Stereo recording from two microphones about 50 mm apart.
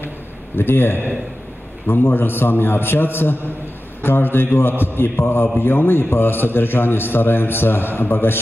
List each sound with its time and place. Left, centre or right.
0.6 s a man's voice: left